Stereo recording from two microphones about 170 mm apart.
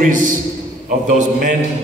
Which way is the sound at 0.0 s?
50° right (ahead or behind).